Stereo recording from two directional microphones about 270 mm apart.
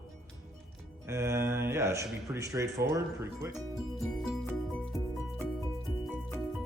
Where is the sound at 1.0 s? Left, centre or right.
Centre.